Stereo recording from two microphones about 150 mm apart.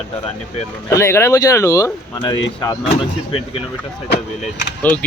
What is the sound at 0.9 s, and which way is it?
Speech, 20° left (ahead or behind).